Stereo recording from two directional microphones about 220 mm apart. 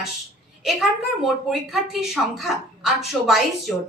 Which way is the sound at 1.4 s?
Centre (ahead or behind).